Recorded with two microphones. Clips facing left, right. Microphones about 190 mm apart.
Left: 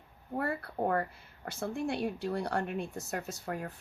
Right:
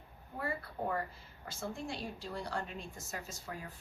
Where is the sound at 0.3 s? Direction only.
60° left (ahead or behind).